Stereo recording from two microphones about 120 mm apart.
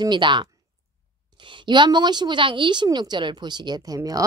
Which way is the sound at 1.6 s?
40° right (ahead or behind).